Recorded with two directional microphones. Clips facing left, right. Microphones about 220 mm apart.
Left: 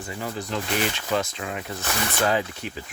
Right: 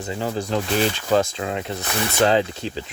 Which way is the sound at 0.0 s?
25° right (ahead or behind).